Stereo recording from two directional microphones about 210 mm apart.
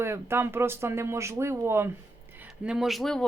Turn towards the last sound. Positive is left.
turn(degrees=0)  # may be behind; listen again after turning